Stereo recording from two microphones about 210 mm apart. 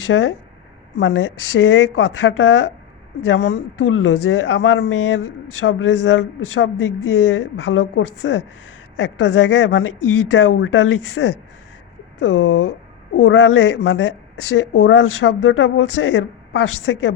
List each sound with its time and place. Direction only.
0.1 s a woman's voice: 60° left (ahead or behind)